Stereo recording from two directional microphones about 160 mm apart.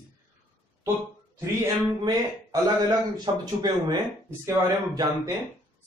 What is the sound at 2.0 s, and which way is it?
Speech, 25° right (ahead or behind).